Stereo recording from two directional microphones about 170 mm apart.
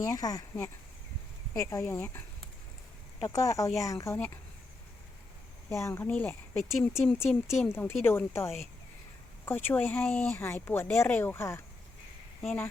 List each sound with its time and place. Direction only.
0.0 s speech: 20° left (ahead or behind)
5.6 s speech: 15° left (ahead or behind)